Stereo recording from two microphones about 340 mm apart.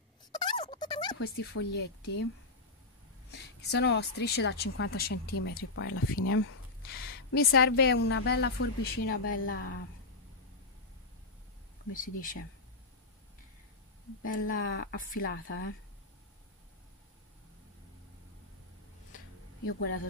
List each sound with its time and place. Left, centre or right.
0.3 s a sound: centre
1.5 s speech: left
3.3 s speech: left
5.9 s speech: left
9.2 s speech: left
11.9 s speech: left
14.4 s speech: left
19.1 s a sound: left